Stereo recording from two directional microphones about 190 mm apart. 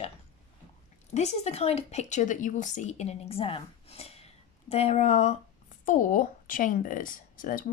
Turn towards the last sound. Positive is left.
turn(degrees=45)  # may be behind; listen again after turning